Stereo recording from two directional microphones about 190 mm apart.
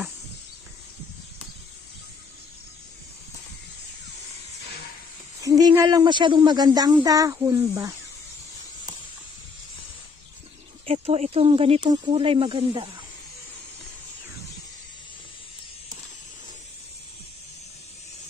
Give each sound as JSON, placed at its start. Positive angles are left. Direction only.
{"t": 5.4, "sound": "speech", "side_deg": -15}
{"t": 10.9, "sound": "speech", "side_deg": -30}